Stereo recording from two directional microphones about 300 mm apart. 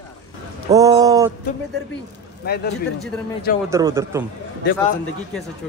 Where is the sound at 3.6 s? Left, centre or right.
Centre.